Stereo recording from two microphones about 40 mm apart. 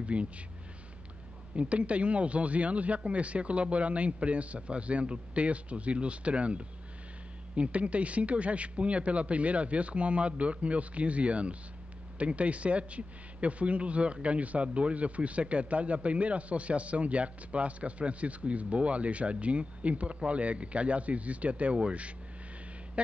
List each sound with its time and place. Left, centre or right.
0.0 s a man's voice: right
1.6 s a man's voice: right
23.0 s speech: right